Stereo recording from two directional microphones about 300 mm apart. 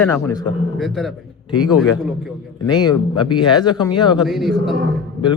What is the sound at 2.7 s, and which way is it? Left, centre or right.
Speech, centre.